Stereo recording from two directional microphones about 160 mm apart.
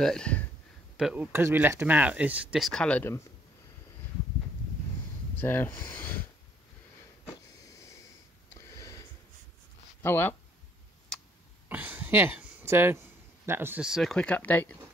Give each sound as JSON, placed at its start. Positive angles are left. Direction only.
{"t": 0.0, "sound": "speech", "side_deg": 5}
{"t": 0.9, "sound": "speech", "side_deg": -5}
{"t": 2.5, "sound": "speech", "side_deg": 0}
{"t": 5.4, "sound": "speech", "side_deg": 10}
{"t": 7.2, "sound": "a sound", "side_deg": 20}
{"t": 8.5, "sound": "sniff", "side_deg": 20}
{"t": 10.0, "sound": "speech", "side_deg": 15}
{"t": 11.7, "sound": "a sound", "side_deg": -10}
{"t": 13.5, "sound": "speech", "side_deg": -15}